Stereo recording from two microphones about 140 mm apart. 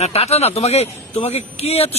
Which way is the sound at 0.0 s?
50° left (ahead or behind).